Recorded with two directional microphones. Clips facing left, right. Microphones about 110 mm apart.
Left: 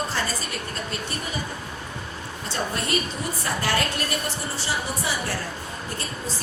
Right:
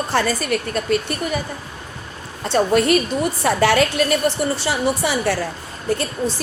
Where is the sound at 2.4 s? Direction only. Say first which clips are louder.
Right 13 dB; 75° right (ahead or behind).